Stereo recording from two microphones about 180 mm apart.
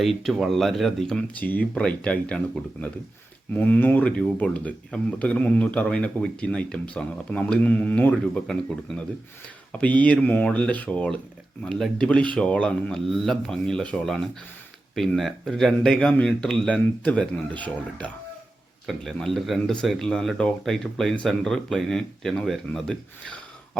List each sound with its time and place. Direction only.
0.0 s a man's voice: centre (ahead or behind)
3.5 s a man's voice: 10° left (ahead or behind)